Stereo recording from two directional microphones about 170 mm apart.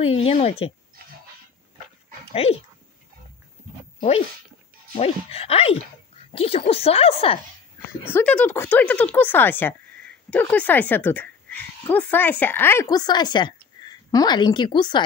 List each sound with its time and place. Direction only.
0.0 s speech: 35° left (ahead or behind)
4.9 s speech: 35° left (ahead or behind)
8.0 s speech: 10° left (ahead or behind); by 15.0 s 25° left (ahead or behind)